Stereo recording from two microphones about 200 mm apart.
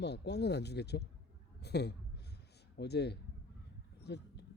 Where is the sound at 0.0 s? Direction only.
60° left (ahead or behind).